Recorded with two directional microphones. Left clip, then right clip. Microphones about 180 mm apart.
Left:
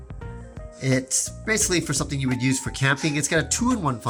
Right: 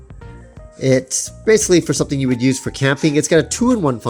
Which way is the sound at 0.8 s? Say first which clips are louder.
Right 8 dB; 35° right (ahead or behind).